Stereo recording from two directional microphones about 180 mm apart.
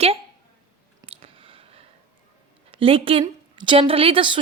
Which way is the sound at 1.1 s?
30° right (ahead or behind).